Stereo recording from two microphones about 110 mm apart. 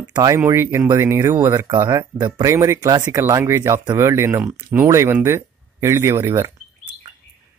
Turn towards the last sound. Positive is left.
turn(degrees=-25)  # may be behind; listen again after turning